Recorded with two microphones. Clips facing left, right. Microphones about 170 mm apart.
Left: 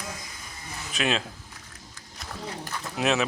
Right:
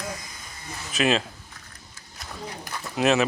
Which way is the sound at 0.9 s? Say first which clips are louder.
Right 4 dB; centre (ahead or behind).